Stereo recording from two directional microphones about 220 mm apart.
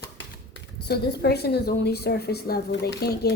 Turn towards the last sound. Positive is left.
turn(degrees=50)  # may be behind; listen again after turning